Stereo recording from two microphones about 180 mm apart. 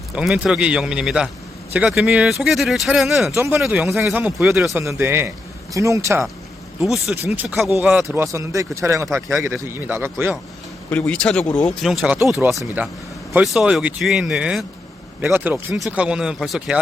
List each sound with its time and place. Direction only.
0.2 s speech: 5° right (ahead or behind)
3.3 s a man's voice: 15° right (ahead or behind)
3.6 s speech: centre (ahead or behind)
4.7 s a man's voice: 15° right (ahead or behind)
6.7 s speech: centre (ahead or behind)
8.0 s a man's voice: 15° right (ahead or behind)
10.8 s speech: 5° left (ahead or behind)